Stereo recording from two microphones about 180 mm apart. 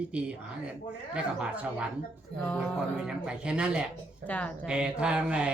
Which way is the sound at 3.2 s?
5° right (ahead or behind).